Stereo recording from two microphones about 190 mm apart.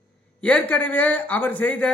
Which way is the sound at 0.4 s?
10° left (ahead or behind).